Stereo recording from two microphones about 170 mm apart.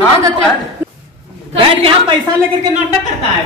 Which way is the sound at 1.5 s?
30° right (ahead or behind).